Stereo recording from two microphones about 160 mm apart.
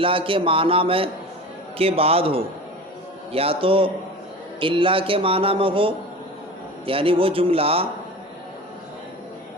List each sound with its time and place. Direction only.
0.0 s a man's voice: 35° right (ahead or behind)